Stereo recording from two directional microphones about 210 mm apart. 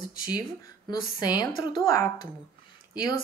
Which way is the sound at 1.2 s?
20° left (ahead or behind).